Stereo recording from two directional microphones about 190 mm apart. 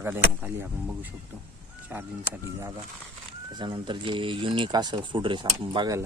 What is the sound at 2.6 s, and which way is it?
Speech, 15° right (ahead or behind).